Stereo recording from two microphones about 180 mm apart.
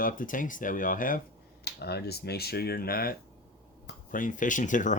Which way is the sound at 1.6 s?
65° left (ahead or behind).